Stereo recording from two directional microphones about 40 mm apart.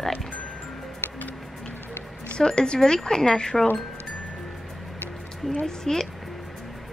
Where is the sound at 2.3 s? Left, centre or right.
Left.